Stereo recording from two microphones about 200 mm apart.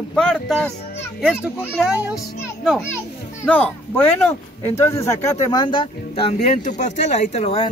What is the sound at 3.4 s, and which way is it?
Speech, 5° left (ahead or behind).